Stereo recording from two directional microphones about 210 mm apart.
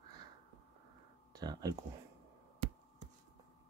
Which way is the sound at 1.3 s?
20° right (ahead or behind).